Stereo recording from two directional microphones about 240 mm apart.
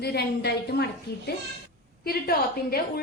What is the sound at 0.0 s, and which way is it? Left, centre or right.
A woman's voice, left.